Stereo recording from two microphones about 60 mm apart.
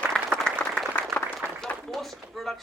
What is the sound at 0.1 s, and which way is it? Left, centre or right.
Applause, centre.